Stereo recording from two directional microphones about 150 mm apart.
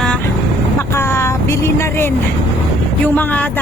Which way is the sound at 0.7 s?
15° left (ahead or behind).